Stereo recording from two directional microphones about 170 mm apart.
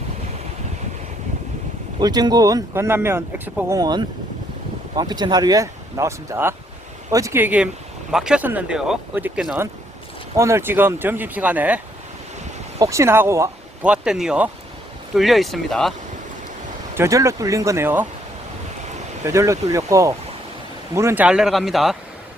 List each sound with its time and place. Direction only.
2.0 s speech: 25° right (ahead or behind)
3.8 s speech: 25° right (ahead or behind); by 9.6 s 5° right (ahead or behind)
10.3 s speech: 15° right (ahead or behind)
12.8 s speech: 15° right (ahead or behind)
13.8 s speech: 5° right (ahead or behind)
17.0 s speech: 20° right (ahead or behind)
19.2 s speech: 15° right (ahead or behind); by 21.9 s centre (ahead or behind)